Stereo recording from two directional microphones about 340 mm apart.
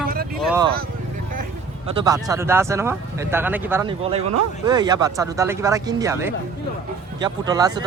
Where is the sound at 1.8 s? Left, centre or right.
Centre.